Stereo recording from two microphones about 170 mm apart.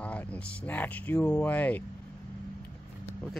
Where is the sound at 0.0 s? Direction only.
10° left (ahead or behind).